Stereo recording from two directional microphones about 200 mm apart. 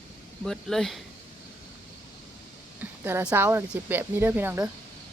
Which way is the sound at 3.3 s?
10° right (ahead or behind).